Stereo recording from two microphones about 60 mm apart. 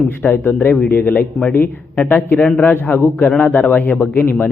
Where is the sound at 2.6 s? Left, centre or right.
Left.